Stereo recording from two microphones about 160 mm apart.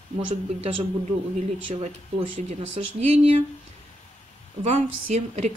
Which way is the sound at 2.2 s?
40° right (ahead or behind).